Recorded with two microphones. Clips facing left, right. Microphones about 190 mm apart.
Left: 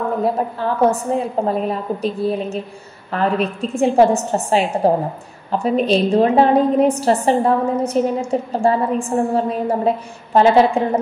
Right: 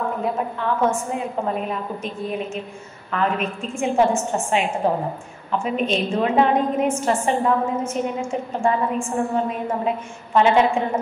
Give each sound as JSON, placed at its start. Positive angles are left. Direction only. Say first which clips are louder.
{"t": 0.2, "sound": "a woman's voice", "louder": "left 5 dB", "side_deg": 35}